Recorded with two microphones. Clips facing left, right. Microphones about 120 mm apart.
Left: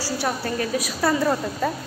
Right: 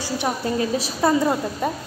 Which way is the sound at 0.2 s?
20° right (ahead or behind).